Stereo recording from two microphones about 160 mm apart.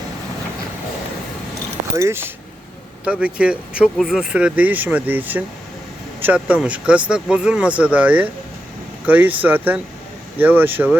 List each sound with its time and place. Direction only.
2.0 s speech: 15° right (ahead or behind)